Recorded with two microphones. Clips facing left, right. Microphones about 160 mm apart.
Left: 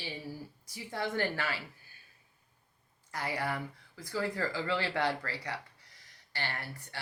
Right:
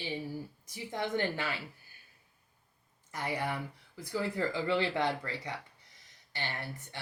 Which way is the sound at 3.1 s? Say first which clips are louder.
Even; 20° right (ahead or behind).